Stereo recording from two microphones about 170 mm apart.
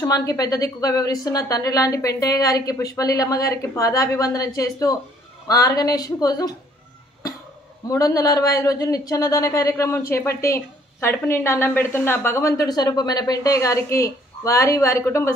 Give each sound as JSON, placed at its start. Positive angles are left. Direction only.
{"t": 0.0, "sound": "a woman's voice", "side_deg": 20}
{"t": 7.9, "sound": "a woman's voice", "side_deg": 20}